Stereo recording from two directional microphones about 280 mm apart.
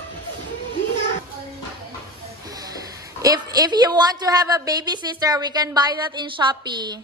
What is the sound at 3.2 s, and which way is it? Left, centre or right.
A woman's voice, centre.